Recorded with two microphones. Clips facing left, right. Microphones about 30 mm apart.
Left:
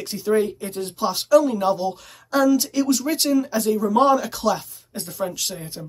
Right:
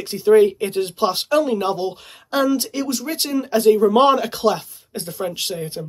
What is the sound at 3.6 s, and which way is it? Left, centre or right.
Speech, right.